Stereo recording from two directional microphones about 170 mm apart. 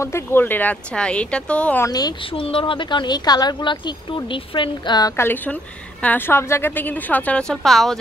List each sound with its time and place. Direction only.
0.0 s a woman's voice: 15° left (ahead or behind)
1.9 s a woman's voice: 25° left (ahead or behind); by 8.0 s centre (ahead or behind)